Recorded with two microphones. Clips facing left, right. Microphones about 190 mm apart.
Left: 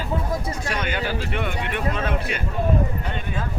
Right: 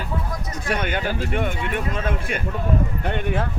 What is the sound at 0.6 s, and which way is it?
Speech, 55° right (ahead or behind).